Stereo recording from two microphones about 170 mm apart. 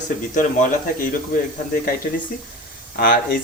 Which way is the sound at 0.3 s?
50° left (ahead or behind).